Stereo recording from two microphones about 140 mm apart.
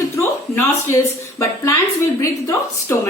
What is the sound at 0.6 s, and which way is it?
A woman's voice, 20° left (ahead or behind).